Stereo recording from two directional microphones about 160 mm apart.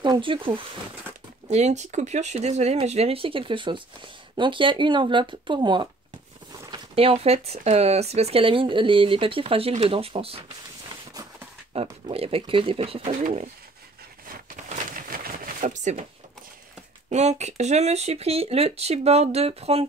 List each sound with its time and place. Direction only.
0.0 s speech: 30° right (ahead or behind)
1.5 s speech: 45° right (ahead or behind)
7.0 s speech: 35° right (ahead or behind)
11.7 s speech: 40° right (ahead or behind)
14.2 s a sound: 60° right (ahead or behind)
17.1 s speech: 45° right (ahead or behind)